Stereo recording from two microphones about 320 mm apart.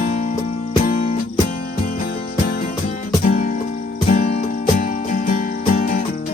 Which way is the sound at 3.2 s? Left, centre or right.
Left.